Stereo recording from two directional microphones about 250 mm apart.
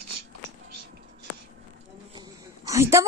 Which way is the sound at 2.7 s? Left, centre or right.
Centre.